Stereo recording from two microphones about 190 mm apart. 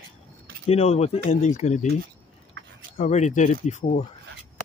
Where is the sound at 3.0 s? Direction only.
35° left (ahead or behind).